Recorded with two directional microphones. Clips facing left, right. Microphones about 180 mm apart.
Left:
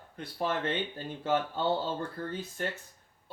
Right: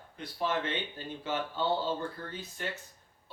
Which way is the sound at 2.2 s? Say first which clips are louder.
Left 6 dB; 50° left (ahead or behind).